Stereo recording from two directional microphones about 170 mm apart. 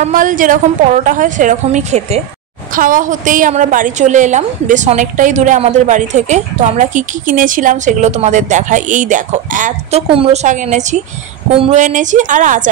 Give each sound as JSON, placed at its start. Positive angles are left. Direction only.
{"t": 0.0, "sound": "a woman's voice", "side_deg": -50}
{"t": 2.7, "sound": "a woman's voice", "side_deg": -55}
{"t": 11.5, "sound": "speech", "side_deg": -35}
{"t": 11.8, "sound": "a woman's voice", "side_deg": -45}